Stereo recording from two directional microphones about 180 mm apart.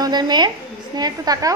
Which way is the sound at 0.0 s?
25° right (ahead or behind).